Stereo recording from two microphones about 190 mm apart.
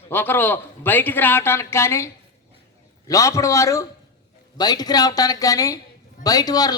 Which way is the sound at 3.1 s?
15° left (ahead or behind).